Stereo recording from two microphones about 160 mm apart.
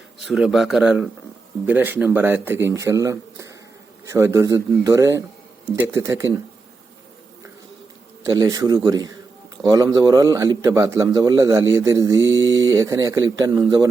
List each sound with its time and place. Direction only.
0.3 s a man's voice: centre (ahead or behind); by 6.3 s 20° right (ahead or behind)
8.2 s a man's voice: 20° right (ahead or behind)